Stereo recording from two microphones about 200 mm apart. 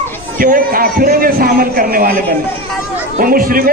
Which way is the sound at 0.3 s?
45° right (ahead or behind).